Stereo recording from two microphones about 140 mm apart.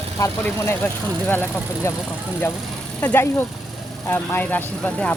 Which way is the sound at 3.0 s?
15° left (ahead or behind).